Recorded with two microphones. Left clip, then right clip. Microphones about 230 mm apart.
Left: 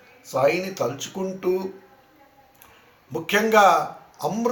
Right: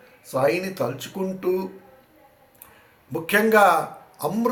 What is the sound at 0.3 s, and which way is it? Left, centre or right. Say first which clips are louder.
Speech: left 1 dB; right.